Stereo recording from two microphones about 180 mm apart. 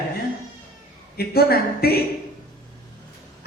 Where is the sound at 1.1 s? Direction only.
60° left (ahead or behind).